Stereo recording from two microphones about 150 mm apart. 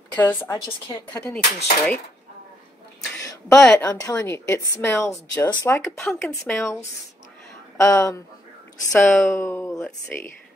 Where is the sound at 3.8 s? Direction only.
20° left (ahead or behind).